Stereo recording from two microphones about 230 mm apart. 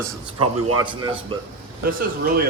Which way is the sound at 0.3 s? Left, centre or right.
Right.